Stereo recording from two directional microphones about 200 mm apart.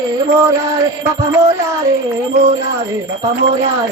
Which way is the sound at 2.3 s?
35° right (ahead or behind).